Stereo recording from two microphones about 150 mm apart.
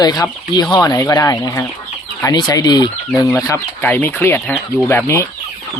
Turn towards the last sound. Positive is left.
turn(degrees=20)  # may be behind; listen again after turning